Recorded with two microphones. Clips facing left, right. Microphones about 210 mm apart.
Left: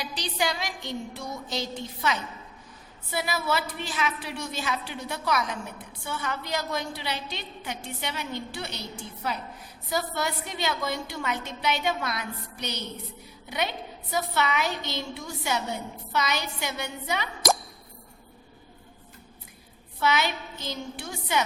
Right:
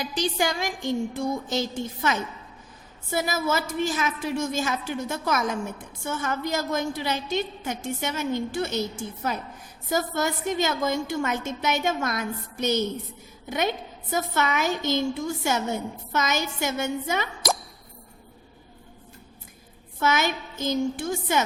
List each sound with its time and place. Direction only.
0.0 s a woman's voice: 45° right (ahead or behind)
20.0 s a woman's voice: 45° right (ahead or behind)